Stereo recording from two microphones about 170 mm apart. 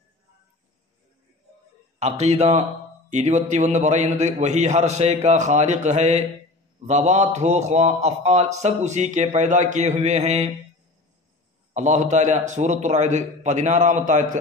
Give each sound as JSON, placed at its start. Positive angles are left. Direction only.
{"t": 2.0, "sound": "a man's voice", "side_deg": -40}
{"t": 11.7, "sound": "a man's voice", "side_deg": -45}